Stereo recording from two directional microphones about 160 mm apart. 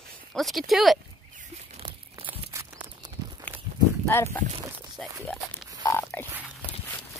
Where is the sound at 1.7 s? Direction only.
40° right (ahead or behind).